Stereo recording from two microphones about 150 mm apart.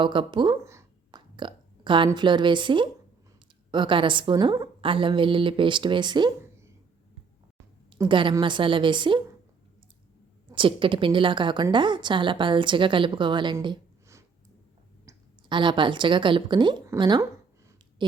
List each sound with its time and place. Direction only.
0.0 s a woman's voice: 35° right (ahead or behind)
0.6 s a sound: 20° right (ahead or behind)
1.1 s burping: 30° right (ahead or behind)
2.0 s a woman's voice: 30° right (ahead or behind)
7.9 s a woman's voice: 30° right (ahead or behind)
10.5 s a woman's voice: 35° right (ahead or behind)
15.4 s a woman's voice: 30° right (ahead or behind)